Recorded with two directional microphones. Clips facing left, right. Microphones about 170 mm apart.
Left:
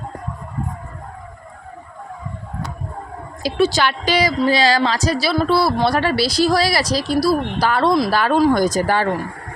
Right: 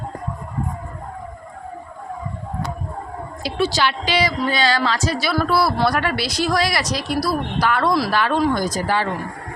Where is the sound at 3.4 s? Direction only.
45° left (ahead or behind).